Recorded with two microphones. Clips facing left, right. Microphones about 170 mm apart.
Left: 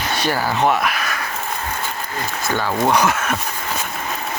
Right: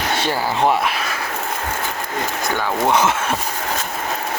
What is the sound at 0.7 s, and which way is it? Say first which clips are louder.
Speech: even; 30° right (ahead or behind).